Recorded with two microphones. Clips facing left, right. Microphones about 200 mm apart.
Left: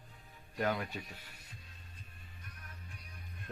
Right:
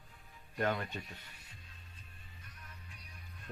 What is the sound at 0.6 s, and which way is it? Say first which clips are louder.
Speech: even; 5° left (ahead or behind).